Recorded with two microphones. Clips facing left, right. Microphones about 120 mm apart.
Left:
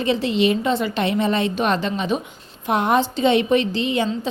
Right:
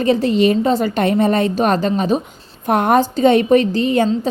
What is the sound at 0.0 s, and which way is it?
A woman's voice, 45° right (ahead or behind).